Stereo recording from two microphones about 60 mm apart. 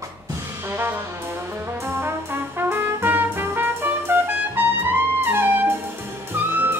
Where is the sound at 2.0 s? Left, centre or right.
Right.